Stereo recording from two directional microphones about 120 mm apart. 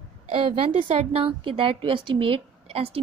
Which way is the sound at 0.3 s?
50° right (ahead or behind).